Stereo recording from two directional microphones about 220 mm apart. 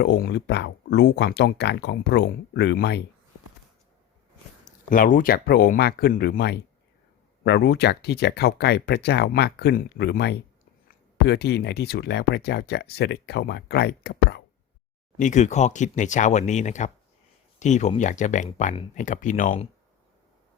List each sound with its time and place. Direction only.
0.0 s speech: 50° left (ahead or behind)
4.9 s speech: 40° left (ahead or behind)
15.2 s speech: 35° left (ahead or behind)